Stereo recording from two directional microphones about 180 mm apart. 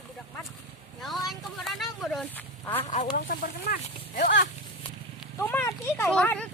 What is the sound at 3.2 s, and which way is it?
Speech, 50° left (ahead or behind).